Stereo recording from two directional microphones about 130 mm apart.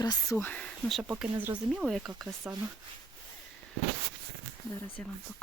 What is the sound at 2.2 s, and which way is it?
Speech, 25° right (ahead or behind).